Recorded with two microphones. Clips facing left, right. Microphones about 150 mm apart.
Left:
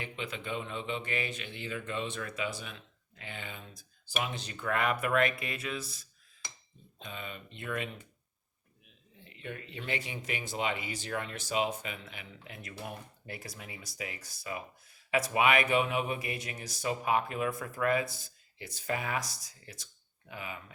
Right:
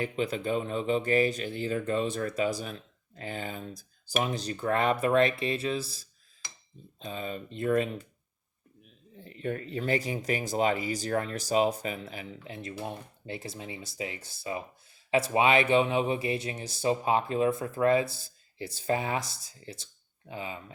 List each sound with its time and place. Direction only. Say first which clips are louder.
0.0 s speech: right 9 dB; 40° right (ahead or behind)
9.1 s speech: right 9 dB; 40° right (ahead or behind)